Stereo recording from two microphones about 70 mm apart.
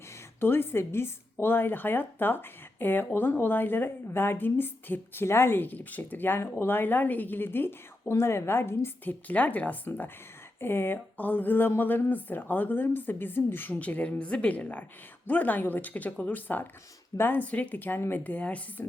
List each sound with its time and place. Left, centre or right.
0.3 s a woman's voice: left
9.2 s speech: left